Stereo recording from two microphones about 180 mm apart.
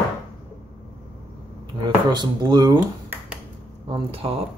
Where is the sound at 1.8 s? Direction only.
25° right (ahead or behind).